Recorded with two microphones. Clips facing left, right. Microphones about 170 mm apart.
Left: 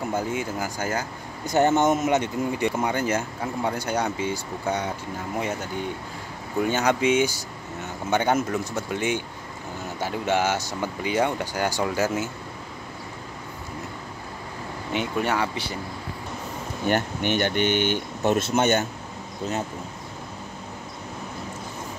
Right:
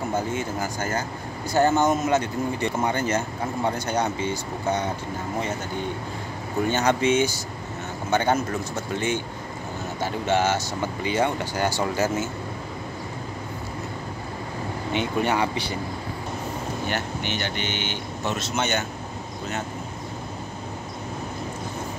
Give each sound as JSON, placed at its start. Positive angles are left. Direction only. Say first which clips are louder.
{"t": 0.1, "sound": "speech", "louder": "even", "side_deg": 10}
{"t": 6.7, "sound": "speech", "louder": "right 1 dB", "side_deg": 10}
{"t": 14.9, "sound": "speech", "louder": "right 1 dB", "side_deg": 5}
{"t": 16.8, "sound": "speech", "louder": "left 8 dB", "side_deg": 50}